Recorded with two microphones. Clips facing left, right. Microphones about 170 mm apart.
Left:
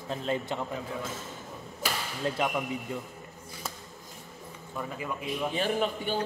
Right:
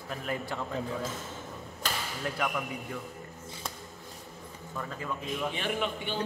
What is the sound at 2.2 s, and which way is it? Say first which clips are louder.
Speech: left 4 dB; 25° left (ahead or behind).